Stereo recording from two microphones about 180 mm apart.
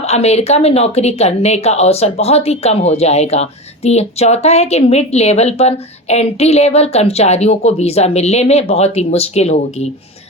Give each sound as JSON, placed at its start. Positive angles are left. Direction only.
{"t": 0.0, "sound": "speech", "side_deg": 35}